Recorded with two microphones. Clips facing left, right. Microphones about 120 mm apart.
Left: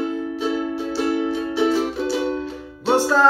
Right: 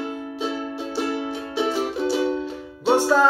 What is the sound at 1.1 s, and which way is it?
Music, 15° right (ahead or behind).